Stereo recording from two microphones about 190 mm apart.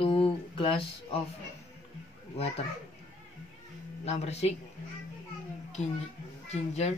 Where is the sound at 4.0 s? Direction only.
35° left (ahead or behind).